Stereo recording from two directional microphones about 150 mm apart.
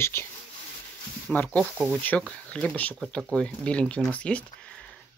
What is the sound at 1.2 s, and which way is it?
Speech, 10° left (ahead or behind).